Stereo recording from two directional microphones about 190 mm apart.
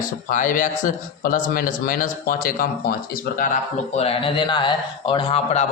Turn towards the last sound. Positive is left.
turn(degrees=30)  # may be behind; listen again after turning